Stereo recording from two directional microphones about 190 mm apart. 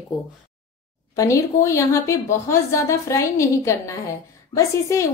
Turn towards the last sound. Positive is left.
turn(degrees=15)  # may be behind; listen again after turning